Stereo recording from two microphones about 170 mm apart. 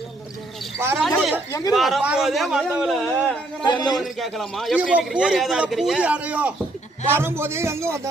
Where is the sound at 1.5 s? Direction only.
20° left (ahead or behind).